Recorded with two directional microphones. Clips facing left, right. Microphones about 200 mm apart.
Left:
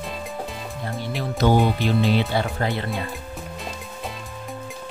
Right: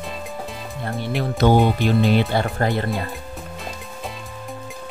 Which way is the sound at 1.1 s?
55° right (ahead or behind).